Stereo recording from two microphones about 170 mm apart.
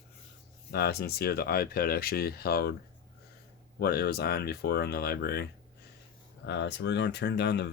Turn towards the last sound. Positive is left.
turn(degrees=90)